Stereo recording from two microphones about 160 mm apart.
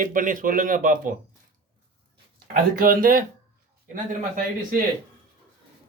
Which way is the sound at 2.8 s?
60° right (ahead or behind).